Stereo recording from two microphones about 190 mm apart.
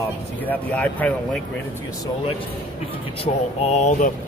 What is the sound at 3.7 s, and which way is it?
Speech, 40° left (ahead or behind).